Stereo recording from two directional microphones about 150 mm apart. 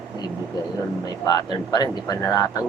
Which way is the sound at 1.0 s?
25° left (ahead or behind).